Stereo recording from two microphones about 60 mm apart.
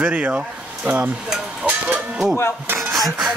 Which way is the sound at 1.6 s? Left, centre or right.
Right.